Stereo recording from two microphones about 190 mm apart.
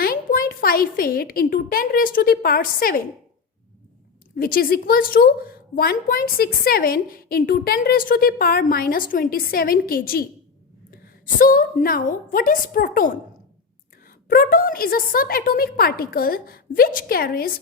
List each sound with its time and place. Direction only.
0.0 s a woman's voice: 50° left (ahead or behind)
4.4 s a woman's voice: 50° left (ahead or behind)
14.3 s a woman's voice: 50° left (ahead or behind)